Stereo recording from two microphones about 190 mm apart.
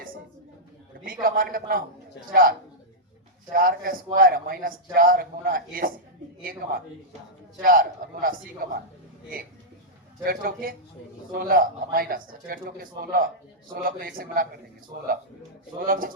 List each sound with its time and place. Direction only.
1.0 s a man's voice: 50° right (ahead or behind)
10.2 s a man's voice: 50° right (ahead or behind)
15.9 s a man's voice: 50° right (ahead or behind)